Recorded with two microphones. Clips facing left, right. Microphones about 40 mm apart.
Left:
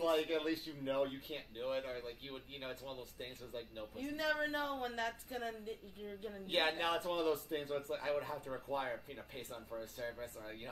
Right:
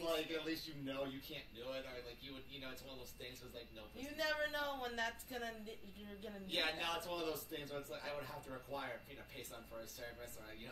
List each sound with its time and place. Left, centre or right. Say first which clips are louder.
0.2 s a man's voice: left 6 dB; left
4.4 s speech: left 3 dB; centre
6.4 s a man's voice: left 6 dB; left